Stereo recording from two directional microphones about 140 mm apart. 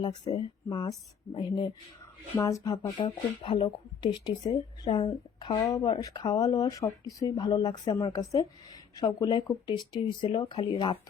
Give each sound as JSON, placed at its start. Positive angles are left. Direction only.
{"t": 0.0, "sound": "speech", "side_deg": 35}
{"t": 5.6, "sound": "speech", "side_deg": 25}